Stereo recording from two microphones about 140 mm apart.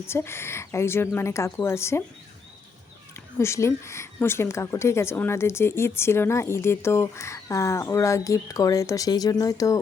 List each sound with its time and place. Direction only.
0.1 s a woman's voice: 15° left (ahead or behind)
3.3 s a woman's voice: 20° left (ahead or behind)